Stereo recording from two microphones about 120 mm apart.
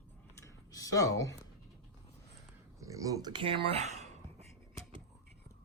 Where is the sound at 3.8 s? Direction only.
70° right (ahead or behind).